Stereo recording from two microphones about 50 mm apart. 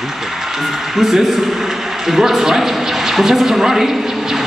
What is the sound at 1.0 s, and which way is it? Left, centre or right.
Speech, centre.